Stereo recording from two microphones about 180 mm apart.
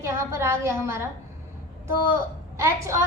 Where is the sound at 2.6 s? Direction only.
15° right (ahead or behind).